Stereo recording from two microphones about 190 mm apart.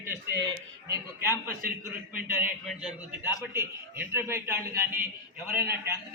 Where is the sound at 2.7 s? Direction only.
5° right (ahead or behind).